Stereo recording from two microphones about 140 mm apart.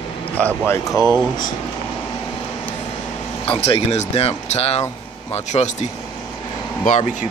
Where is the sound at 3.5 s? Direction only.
40° left (ahead or behind).